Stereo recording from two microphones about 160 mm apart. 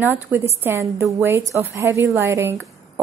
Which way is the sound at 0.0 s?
10° right (ahead or behind).